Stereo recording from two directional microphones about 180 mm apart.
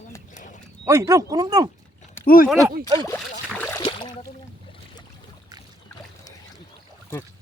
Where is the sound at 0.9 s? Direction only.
15° right (ahead or behind).